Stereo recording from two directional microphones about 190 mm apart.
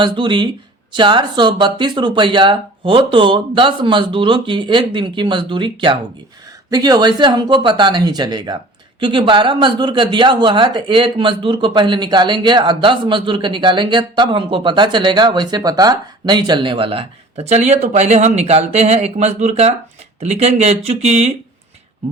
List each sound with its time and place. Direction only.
0.0 s speech: 25° right (ahead or behind)